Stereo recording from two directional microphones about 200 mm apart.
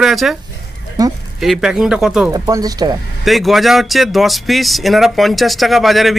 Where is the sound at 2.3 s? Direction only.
15° right (ahead or behind).